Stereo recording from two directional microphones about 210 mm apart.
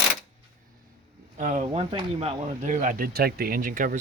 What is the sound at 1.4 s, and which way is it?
Speech, 30° right (ahead or behind).